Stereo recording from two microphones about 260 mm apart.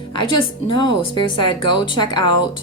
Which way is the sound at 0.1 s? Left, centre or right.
Centre.